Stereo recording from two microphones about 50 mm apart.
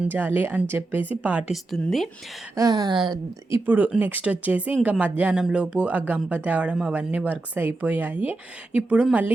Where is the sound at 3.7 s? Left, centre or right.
Right.